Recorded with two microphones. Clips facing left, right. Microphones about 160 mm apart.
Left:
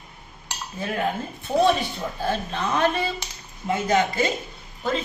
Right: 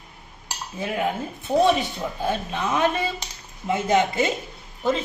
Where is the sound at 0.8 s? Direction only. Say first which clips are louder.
Right 1 dB; 15° right (ahead or behind).